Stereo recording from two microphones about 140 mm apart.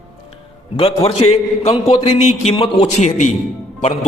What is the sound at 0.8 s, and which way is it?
A man's voice, 45° left (ahead or behind).